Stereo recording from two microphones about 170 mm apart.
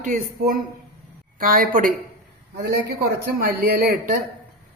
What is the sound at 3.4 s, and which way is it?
Speech, 55° right (ahead or behind).